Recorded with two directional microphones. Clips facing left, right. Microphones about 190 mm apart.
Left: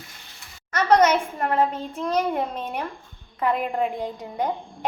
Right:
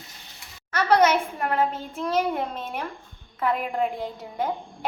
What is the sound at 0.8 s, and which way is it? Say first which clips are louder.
A child's voice: left 1 dB; 10° right (ahead or behind).